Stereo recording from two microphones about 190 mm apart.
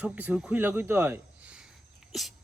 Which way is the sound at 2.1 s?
Centre (ahead or behind).